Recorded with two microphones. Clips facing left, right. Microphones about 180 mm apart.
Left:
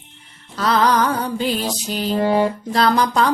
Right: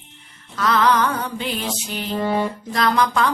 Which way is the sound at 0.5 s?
35° left (ahead or behind).